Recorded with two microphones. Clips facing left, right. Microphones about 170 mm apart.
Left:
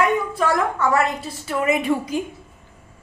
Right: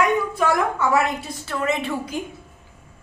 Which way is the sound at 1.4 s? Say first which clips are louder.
Left 4 dB; 10° left (ahead or behind).